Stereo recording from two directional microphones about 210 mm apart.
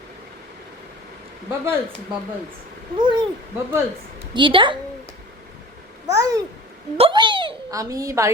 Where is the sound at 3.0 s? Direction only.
20° right (ahead or behind).